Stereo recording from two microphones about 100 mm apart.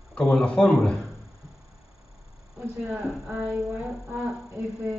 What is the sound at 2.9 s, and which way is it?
Speech, 10° right (ahead or behind).